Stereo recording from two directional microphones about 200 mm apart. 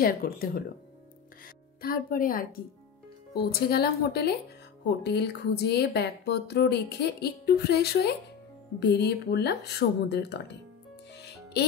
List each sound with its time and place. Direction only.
0.0 s speech: 45° left (ahead or behind)
1.8 s speech: 45° left (ahead or behind)
11.1 s music: 55° left (ahead or behind)